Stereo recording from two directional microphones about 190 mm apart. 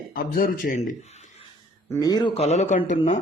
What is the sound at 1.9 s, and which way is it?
Speech, 20° left (ahead or behind).